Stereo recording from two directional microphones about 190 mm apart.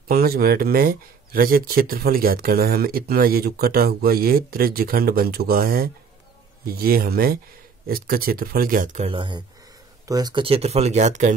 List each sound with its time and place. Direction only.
0.1 s speech: 50° right (ahead or behind)
9.1 s speech: 25° right (ahead or behind)